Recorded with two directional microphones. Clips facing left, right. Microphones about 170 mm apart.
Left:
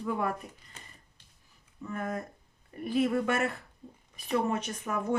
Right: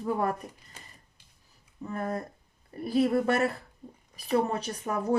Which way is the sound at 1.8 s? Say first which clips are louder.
Right 2 dB; 35° right (ahead or behind).